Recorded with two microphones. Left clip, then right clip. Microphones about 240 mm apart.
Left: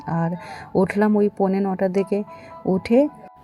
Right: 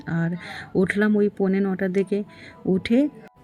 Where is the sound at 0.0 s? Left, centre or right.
Centre.